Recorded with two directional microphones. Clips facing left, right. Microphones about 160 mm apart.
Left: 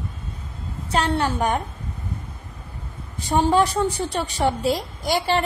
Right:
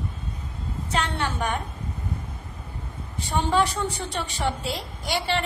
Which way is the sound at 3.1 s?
40° left (ahead or behind).